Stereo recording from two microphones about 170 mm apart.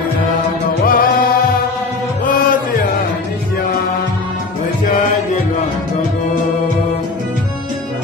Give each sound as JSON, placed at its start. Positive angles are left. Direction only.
{"t": 0.8, "sound": "music", "side_deg": 55}